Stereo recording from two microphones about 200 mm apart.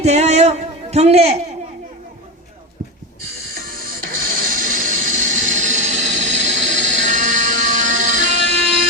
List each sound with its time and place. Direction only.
0.0 s a man's voice: 35° right (ahead or behind)
3.7 s music: 45° right (ahead or behind)